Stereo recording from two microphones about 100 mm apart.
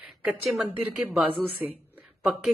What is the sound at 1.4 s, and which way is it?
Speech, 20° right (ahead or behind).